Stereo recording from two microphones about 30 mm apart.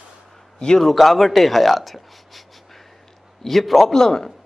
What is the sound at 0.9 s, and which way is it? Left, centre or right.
Speech, centre.